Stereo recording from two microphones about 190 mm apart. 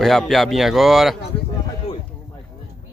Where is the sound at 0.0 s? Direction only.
Centre (ahead or behind).